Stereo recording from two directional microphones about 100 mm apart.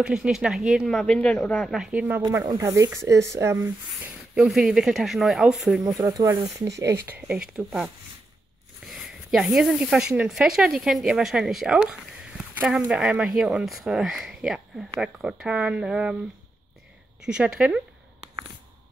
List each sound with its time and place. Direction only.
0.0 s speech: 5° right (ahead or behind); by 1.7 s 15° left (ahead or behind)
1.7 s speech: 10° right (ahead or behind)
2.4 s speech: 30° right (ahead or behind)
4.4 s speech: 5° right (ahead or behind)
5.8 s speech: 35° right (ahead or behind)
6.6 s speech: 30° right (ahead or behind)
7.1 s speech: 15° right (ahead or behind)
8.9 s speech: 5° right (ahead or behind)
17.2 s speech: 5° right (ahead or behind)